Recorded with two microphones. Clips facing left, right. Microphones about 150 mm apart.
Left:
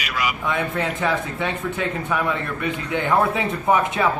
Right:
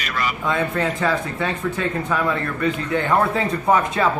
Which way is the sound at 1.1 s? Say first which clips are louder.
Right 1 dB; 20° left (ahead or behind).